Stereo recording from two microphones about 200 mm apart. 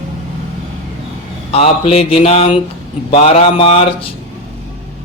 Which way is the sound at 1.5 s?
30° left (ahead or behind).